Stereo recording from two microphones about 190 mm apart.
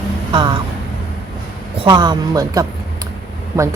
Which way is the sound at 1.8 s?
20° right (ahead or behind).